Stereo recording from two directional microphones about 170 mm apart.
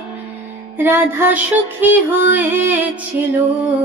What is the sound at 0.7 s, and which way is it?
Mantra, 15° right (ahead or behind).